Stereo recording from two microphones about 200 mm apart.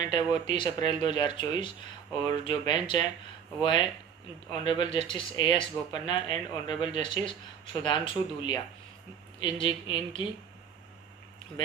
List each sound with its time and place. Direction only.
0.1 s speech: 25° left (ahead or behind)